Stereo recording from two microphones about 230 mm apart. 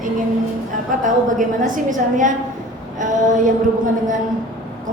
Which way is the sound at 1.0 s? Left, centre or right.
Right.